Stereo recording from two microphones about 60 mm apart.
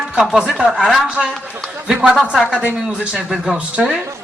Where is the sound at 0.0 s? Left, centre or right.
Centre.